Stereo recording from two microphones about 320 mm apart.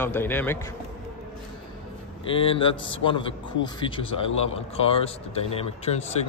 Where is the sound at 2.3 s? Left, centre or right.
Centre.